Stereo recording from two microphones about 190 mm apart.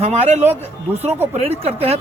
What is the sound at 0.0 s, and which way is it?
Speech, 35° right (ahead or behind).